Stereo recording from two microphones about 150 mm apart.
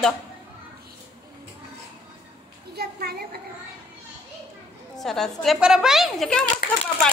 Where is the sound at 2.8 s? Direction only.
90° right.